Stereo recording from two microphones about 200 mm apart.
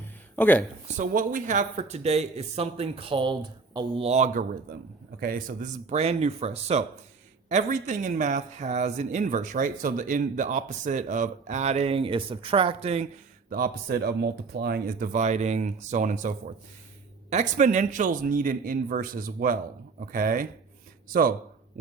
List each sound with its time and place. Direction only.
0.3 s speech: 10° left (ahead or behind)
0.9 s speech: 40° right (ahead or behind)
13.5 s speech: 50° right (ahead or behind)